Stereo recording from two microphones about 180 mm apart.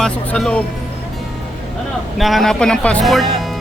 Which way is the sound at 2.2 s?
Centre (ahead or behind).